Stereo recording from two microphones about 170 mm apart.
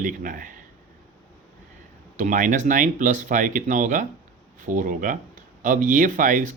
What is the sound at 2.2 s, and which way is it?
Speech, 50° right (ahead or behind).